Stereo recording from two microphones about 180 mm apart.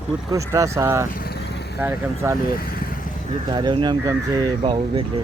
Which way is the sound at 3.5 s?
25° right (ahead or behind).